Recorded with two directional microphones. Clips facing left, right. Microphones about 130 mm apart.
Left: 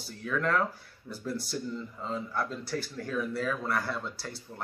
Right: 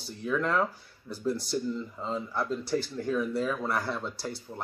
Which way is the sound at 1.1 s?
Centre (ahead or behind).